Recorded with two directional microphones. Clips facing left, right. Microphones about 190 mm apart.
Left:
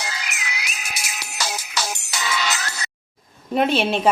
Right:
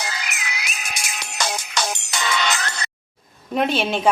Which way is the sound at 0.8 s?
5° left (ahead or behind).